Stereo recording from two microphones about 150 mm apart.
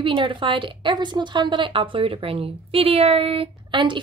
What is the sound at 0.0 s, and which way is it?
A woman's voice, 35° right (ahead or behind).